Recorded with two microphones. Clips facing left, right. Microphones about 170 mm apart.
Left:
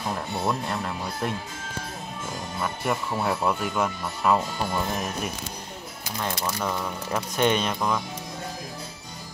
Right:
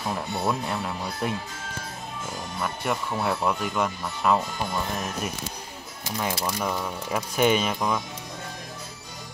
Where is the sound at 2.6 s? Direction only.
Centre (ahead or behind).